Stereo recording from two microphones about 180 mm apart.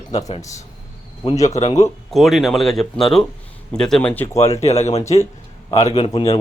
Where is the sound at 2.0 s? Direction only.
Centre (ahead or behind).